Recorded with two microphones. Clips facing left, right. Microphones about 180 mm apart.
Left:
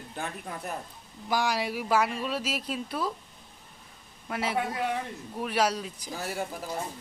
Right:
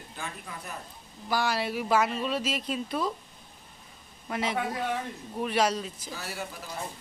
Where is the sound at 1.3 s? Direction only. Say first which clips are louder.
Even; 15° left (ahead or behind).